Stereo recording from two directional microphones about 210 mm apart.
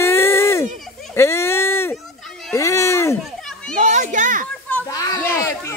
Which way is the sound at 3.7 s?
35° right (ahead or behind).